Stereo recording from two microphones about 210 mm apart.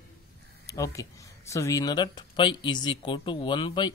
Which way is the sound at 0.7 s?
15° left (ahead or behind).